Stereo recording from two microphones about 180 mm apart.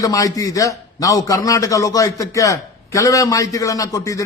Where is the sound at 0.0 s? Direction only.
20° left (ahead or behind).